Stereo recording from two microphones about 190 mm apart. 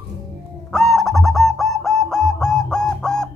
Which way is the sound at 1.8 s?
Centre (ahead or behind).